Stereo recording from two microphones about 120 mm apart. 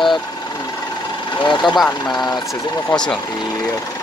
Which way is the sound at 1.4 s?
40° left (ahead or behind).